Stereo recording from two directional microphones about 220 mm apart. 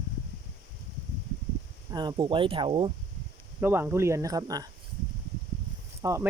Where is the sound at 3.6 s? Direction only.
10° right (ahead or behind).